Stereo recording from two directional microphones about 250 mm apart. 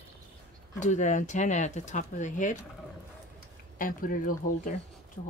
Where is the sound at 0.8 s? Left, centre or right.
Left.